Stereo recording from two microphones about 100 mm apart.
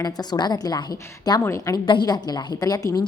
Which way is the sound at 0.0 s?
45° left (ahead or behind).